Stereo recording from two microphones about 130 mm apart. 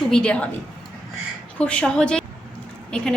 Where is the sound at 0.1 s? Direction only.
5° left (ahead or behind).